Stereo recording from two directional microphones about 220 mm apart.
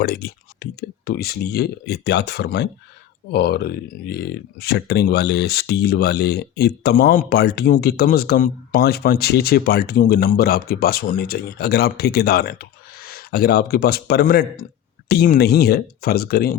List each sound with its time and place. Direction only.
0.0 s speech: 45° left (ahead or behind)